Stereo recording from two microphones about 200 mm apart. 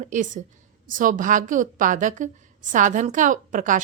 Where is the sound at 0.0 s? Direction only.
40° right (ahead or behind).